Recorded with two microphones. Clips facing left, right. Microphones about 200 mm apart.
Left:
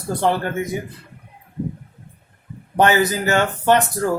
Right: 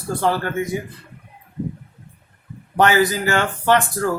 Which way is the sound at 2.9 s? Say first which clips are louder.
Even; 20° left (ahead or behind).